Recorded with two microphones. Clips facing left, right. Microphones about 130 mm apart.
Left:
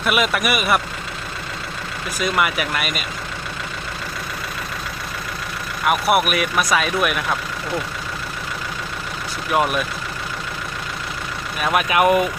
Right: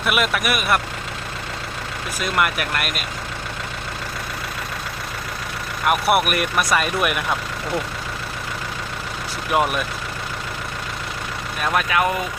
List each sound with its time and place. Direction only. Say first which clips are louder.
0.0 s speech: left 1 dB; centre (ahead or behind)
2.2 s speech: left 1 dB; centre (ahead or behind)
5.8 s speech: left 1 dB; centre (ahead or behind)
9.5 s speech: left 1 dB; centre (ahead or behind)
11.6 s speech: left 3 dB; 15° left (ahead or behind)